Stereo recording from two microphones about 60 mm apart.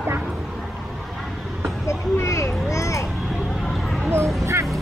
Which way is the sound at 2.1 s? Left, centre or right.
Left.